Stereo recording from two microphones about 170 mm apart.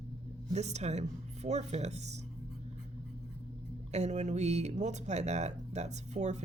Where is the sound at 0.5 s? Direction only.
40° right (ahead or behind).